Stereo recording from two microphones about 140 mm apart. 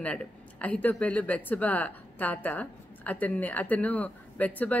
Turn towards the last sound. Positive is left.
turn(degrees=10)  # may be behind; listen again after turning